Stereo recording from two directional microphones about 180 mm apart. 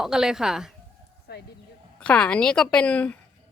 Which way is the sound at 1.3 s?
65° left (ahead or behind).